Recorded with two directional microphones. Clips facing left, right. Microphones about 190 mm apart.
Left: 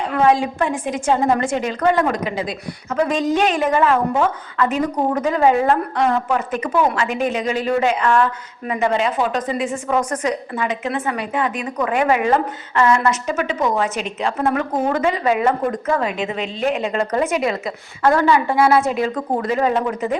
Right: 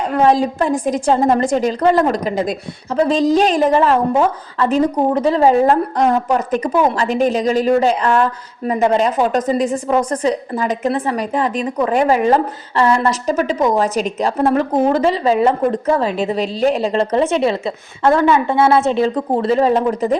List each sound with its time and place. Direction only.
0.0 s a woman's voice: 40° right (ahead or behind)
2.9 s a woman's voice: 30° right (ahead or behind)